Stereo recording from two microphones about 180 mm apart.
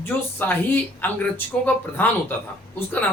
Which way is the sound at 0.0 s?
10° left (ahead or behind).